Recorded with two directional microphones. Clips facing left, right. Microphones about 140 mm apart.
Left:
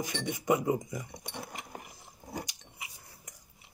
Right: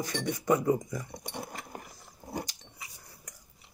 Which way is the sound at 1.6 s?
20° left (ahead or behind).